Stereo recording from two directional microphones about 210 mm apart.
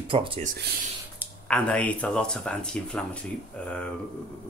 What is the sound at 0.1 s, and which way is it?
Speech, 25° right (ahead or behind).